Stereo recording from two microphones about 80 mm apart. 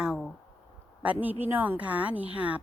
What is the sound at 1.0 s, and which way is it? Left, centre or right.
A woman's voice, right.